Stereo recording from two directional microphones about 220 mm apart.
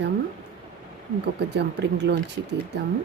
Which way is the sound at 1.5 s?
50° right (ahead or behind).